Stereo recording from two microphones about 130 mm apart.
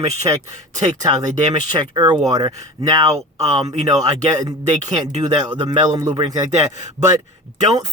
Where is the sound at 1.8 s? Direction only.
35° right (ahead or behind).